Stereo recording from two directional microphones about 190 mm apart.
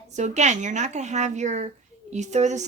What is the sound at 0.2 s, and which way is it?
Speech, 40° right (ahead or behind).